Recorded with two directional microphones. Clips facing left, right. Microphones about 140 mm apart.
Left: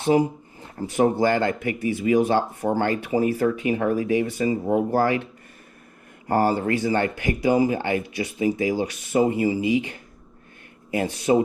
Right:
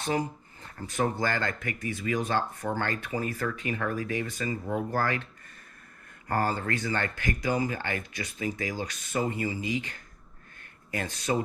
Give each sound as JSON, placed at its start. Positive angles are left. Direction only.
{"t": 0.0, "sound": "speech", "side_deg": 20}
{"t": 2.8, "sound": "speech", "side_deg": 15}
{"t": 6.4, "sound": "speech", "side_deg": 15}